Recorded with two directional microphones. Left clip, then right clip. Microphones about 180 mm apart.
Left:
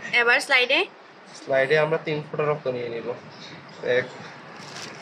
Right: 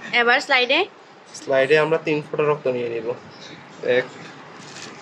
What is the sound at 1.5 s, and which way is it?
Speech, 40° right (ahead or behind).